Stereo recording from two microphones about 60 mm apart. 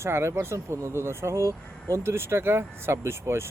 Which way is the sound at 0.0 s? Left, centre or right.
Right.